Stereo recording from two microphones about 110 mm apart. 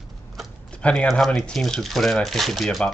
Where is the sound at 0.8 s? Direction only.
5° left (ahead or behind).